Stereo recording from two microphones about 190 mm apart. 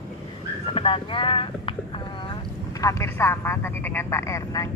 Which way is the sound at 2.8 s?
15° left (ahead or behind).